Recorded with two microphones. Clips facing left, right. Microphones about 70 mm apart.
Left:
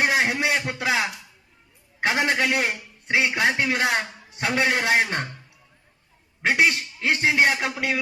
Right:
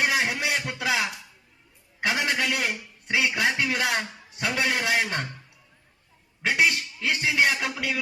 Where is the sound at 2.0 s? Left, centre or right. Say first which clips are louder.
Left 4 dB; left.